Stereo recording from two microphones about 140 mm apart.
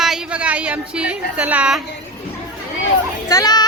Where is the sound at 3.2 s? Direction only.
25° left (ahead or behind).